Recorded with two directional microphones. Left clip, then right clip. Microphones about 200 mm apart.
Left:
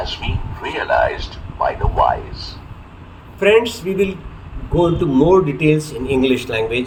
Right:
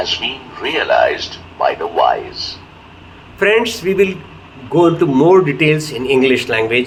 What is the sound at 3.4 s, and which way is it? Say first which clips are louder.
A man's voice: right 1 dB; centre (ahead or behind).